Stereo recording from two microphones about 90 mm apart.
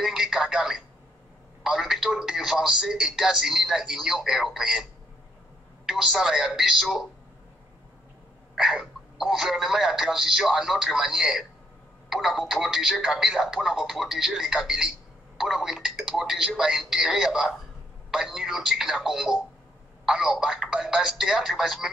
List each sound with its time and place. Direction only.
0.0 s telephone: 5° right (ahead or behind)
1.6 s a man's voice: 5° right (ahead or behind)
5.9 s speech: 5° right (ahead or behind)
8.5 s speech: 5° right (ahead or behind)